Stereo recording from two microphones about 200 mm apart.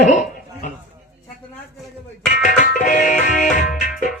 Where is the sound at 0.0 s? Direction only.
40° left (ahead or behind).